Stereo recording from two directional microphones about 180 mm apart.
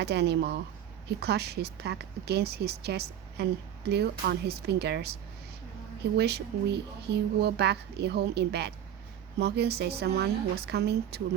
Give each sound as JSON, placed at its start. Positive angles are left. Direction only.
{"t": 0.0, "sound": "speech", "side_deg": -70}